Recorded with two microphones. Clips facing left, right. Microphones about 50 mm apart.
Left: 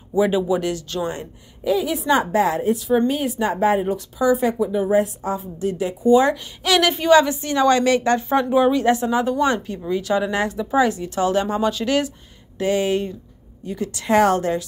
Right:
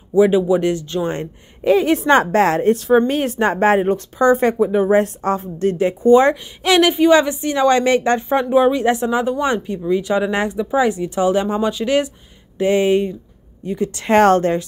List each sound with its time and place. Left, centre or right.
0.1 s speech: centre
1.0 s a woman's voice: right
3.8 s a woman's voice: right
4.9 s a woman's voice: right
6.6 s speech: right
8.4 s a woman's voice: centre; by 14.6 s right